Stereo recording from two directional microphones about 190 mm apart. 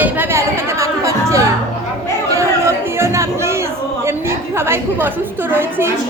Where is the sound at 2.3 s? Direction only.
15° right (ahead or behind).